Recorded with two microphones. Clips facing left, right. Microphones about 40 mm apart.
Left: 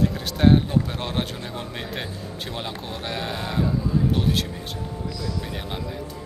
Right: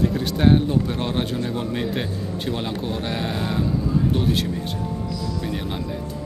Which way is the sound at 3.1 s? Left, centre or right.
Centre.